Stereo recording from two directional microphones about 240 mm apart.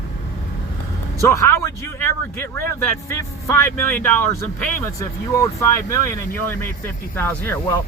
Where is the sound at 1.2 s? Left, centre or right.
Centre.